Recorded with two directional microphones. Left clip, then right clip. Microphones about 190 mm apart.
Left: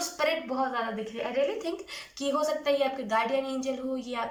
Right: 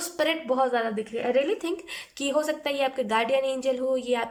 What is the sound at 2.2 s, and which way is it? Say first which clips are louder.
A woman's voice: right 2 dB; 50° right (ahead or behind).